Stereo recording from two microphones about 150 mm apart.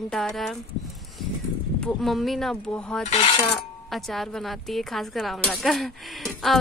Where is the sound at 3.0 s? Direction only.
40° left (ahead or behind).